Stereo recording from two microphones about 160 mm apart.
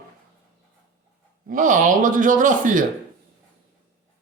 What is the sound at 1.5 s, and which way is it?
Speech, 55° right (ahead or behind).